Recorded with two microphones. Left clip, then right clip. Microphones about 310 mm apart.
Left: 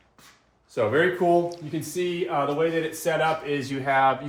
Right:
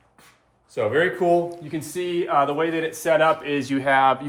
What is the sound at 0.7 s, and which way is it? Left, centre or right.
Speech, centre.